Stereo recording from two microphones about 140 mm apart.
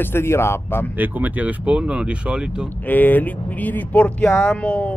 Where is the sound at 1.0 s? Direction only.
10° right (ahead or behind).